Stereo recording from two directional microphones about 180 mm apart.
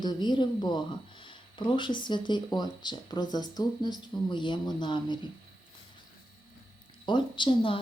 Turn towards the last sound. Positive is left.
turn(degrees=30)  # may be behind; listen again after turning